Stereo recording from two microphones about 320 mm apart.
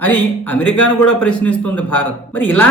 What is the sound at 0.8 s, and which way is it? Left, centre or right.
Speech, left.